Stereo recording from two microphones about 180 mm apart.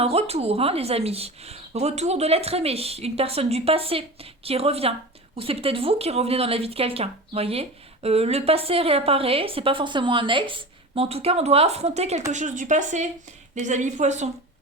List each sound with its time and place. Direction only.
0.0 s speech: 35° right (ahead or behind)